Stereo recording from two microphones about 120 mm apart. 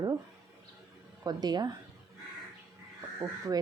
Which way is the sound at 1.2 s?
35° right (ahead or behind).